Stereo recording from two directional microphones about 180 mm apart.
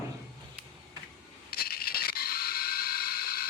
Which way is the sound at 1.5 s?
60° left (ahead or behind).